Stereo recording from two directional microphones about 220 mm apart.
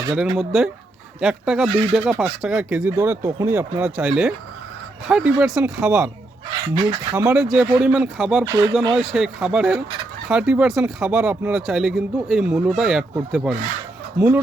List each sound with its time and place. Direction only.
0.3 s speech: centre (ahead or behind)
8.4 s speech: 15° right (ahead or behind)
9.1 s speech: 5° right (ahead or behind)